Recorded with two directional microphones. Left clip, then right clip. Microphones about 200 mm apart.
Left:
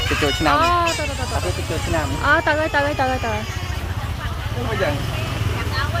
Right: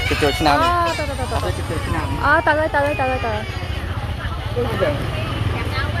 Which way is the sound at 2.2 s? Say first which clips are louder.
Right 2 dB; 5° left (ahead or behind).